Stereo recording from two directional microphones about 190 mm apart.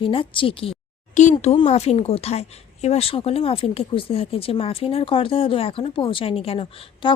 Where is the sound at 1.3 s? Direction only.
25° left (ahead or behind).